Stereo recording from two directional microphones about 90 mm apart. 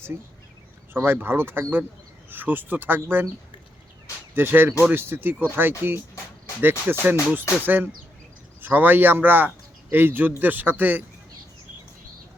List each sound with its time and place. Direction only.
0.9 s speech: 25° right (ahead or behind)
4.4 s speech: 25° right (ahead or behind)